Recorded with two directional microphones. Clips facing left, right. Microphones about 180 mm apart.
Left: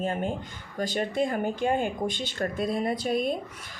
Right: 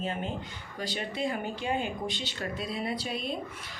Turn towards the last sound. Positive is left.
turn(degrees=50)  # may be behind; listen again after turning